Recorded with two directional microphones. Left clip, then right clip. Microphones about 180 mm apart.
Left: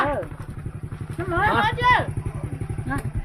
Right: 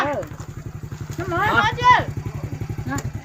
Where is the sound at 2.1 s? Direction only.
70° right (ahead or behind).